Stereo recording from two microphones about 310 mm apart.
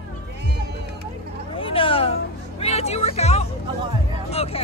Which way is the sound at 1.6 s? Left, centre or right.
Centre.